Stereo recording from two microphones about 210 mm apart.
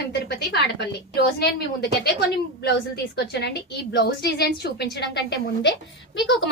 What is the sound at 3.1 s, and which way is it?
A woman's voice, 50° left (ahead or behind).